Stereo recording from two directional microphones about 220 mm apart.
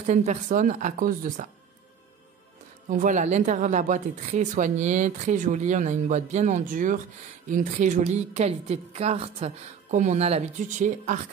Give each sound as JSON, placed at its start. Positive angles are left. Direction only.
{"t": 0.1, "sound": "speech", "side_deg": -30}
{"t": 2.9, "sound": "speech", "side_deg": -35}